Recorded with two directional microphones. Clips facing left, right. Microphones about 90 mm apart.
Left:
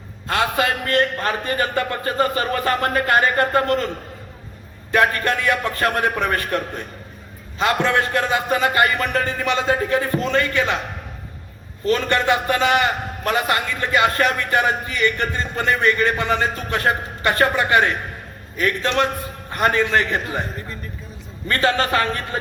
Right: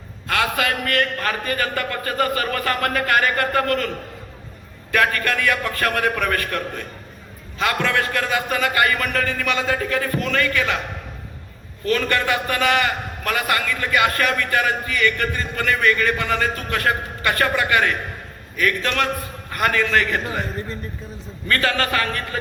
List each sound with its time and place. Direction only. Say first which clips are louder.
0.3 s a man's voice: left 1 dB; 25° left (ahead or behind)
11.9 s a man's voice: left 2 dB; 25° left (ahead or behind)
21.4 s a man's voice: left 2 dB; 25° left (ahead or behind)